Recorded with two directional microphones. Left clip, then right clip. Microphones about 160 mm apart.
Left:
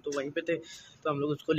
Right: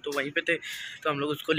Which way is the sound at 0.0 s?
5° left (ahead or behind).